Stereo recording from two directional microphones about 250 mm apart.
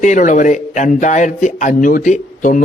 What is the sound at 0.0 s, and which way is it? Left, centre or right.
A man's voice, left.